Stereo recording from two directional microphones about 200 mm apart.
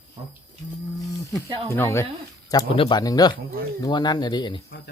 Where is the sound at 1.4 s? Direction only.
25° right (ahead or behind).